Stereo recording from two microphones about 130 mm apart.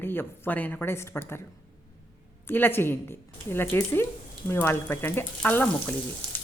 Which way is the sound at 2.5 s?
15° left (ahead or behind).